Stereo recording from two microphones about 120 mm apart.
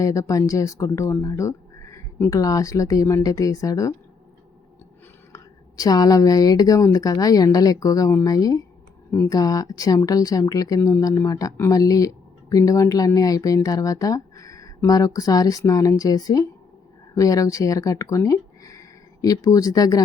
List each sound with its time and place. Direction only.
0.0 s speech: 25° left (ahead or behind)
5.3 s a woman's voice: 30° left (ahead or behind)